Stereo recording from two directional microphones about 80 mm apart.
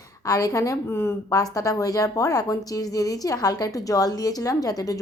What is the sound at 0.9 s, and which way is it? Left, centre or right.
Speech, left.